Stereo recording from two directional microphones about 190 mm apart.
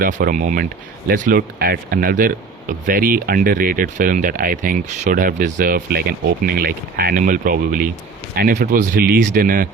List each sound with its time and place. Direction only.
0.2 s speech: 45° right (ahead or behind)
8.4 s speech: 55° right (ahead or behind)